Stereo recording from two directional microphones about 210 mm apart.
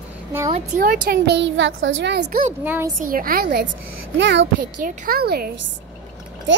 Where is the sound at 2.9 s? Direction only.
40° right (ahead or behind); by 4.4 s 55° right (ahead or behind).